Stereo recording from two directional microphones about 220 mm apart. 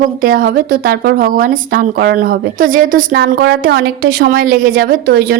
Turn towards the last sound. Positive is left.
turn(degrees=-45)  # may be behind; listen again after turning